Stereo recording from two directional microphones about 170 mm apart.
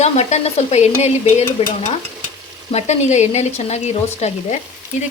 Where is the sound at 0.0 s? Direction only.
40° left (ahead or behind).